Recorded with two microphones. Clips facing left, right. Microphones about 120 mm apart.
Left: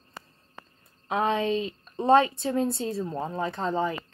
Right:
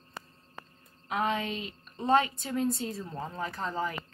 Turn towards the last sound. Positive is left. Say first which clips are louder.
# left 6 dB
turn(degrees=25)  # may be behind; listen again after turning